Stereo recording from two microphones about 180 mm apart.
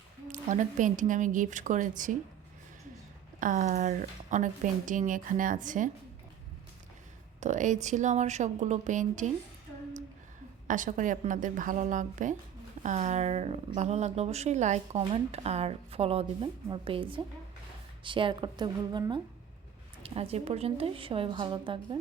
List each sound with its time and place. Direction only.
0.3 s a woman's voice: 45° right (ahead or behind)
3.4 s a woman's voice: 45° right (ahead or behind)
7.3 s speech: 40° right (ahead or behind)
10.7 s a woman's voice: 45° right (ahead or behind); by 19.2 s 25° right (ahead or behind)
20.0 s speech: 35° right (ahead or behind)